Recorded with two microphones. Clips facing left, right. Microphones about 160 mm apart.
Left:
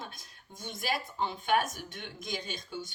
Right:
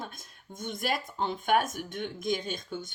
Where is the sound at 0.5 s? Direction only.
50° right (ahead or behind).